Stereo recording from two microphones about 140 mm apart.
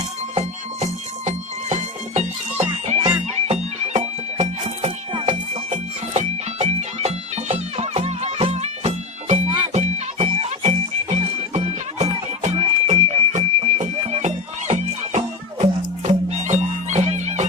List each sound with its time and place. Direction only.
0.3 s music: 55° right (ahead or behind)